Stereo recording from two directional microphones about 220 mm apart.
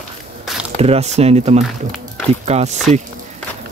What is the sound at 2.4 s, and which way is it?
Speech, 30° right (ahead or behind).